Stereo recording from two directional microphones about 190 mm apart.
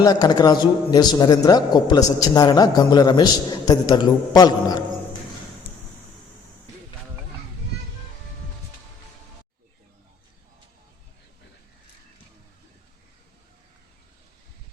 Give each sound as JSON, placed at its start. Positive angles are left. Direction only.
{"t": 0.0, "sound": "a man's voice", "side_deg": 20}